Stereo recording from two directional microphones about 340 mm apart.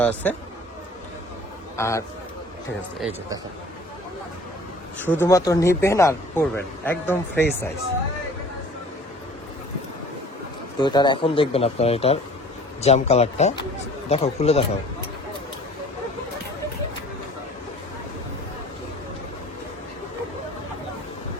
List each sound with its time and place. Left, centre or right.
0.0 s a man's voice: centre
1.7 s a man's voice: centre
4.9 s a man's voice: centre
10.8 s a man's voice: centre